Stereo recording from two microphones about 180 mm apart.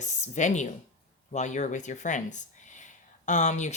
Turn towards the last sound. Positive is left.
turn(degrees=40)  # may be behind; listen again after turning